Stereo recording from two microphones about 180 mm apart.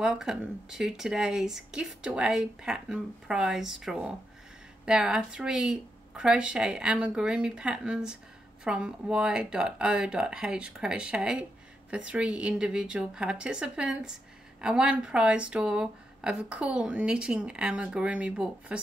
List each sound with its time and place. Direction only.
0.0 s speech: 5° right (ahead or behind)